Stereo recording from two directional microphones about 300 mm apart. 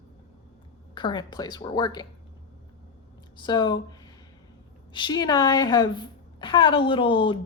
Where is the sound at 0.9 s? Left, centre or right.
Centre.